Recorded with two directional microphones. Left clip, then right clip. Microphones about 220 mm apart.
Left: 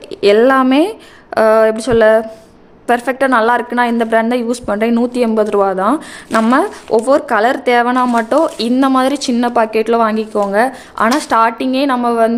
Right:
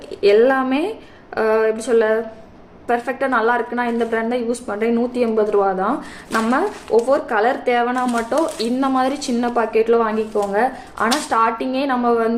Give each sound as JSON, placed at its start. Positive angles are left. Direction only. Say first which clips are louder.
{"t": 0.1, "sound": "a woman's voice", "louder": "left 4 dB", "side_deg": 50}